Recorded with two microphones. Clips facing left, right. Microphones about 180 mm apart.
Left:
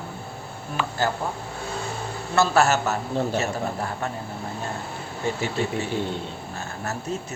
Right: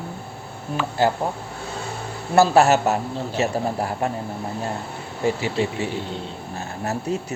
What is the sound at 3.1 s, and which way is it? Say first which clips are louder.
Speech: even; 55° left (ahead or behind).